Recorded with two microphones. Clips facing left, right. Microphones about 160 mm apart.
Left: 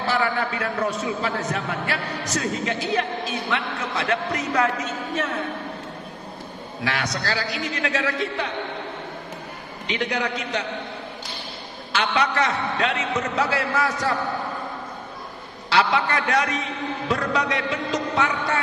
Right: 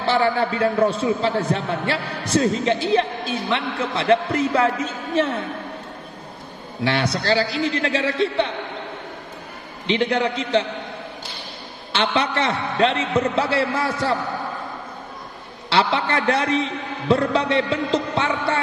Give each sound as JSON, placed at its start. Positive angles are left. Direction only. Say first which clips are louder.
{"t": 0.0, "sound": "a man's voice", "louder": "right 4 dB", "side_deg": -30}
{"t": 6.8, "sound": "a man's voice", "louder": "right 5 dB", "side_deg": -30}
{"t": 9.8, "sound": "a man's voice", "louder": "right 6 dB", "side_deg": -30}
{"t": 11.9, "sound": "a man's voice", "louder": "right 2 dB", "side_deg": -30}
{"t": 15.7, "sound": "a man's voice", "louder": "right 1 dB", "side_deg": -30}